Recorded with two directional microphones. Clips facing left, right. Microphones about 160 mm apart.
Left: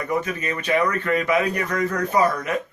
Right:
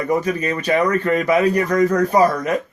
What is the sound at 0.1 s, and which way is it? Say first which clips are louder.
Speech: right 5 dB; 35° right (ahead or behind).